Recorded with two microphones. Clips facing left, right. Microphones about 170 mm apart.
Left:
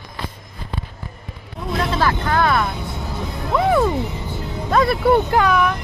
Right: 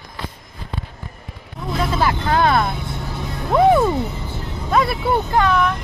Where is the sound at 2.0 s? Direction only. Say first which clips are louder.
Right 2 dB; 25° right (ahead or behind).